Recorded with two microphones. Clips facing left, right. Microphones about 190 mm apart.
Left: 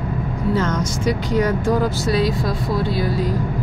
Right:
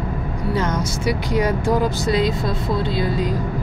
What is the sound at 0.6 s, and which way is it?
Speech, 10° right (ahead or behind).